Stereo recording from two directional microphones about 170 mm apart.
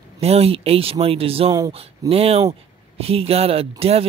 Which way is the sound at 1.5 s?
20° right (ahead or behind).